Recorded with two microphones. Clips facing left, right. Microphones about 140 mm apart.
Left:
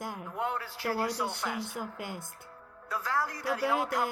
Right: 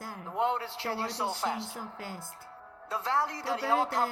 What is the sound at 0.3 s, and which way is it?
A man's voice, 25° right (ahead or behind).